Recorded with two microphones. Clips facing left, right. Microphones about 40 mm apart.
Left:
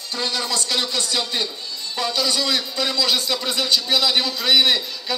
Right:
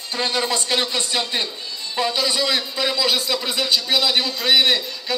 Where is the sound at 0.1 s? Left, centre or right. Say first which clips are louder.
Right 3 dB; right.